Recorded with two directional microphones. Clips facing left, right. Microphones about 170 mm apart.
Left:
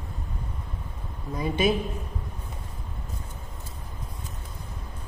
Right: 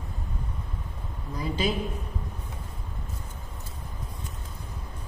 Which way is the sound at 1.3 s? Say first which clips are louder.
Left 4 dB; 20° left (ahead or behind).